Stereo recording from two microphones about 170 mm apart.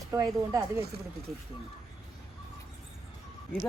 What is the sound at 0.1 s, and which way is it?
Speech, 20° right (ahead or behind).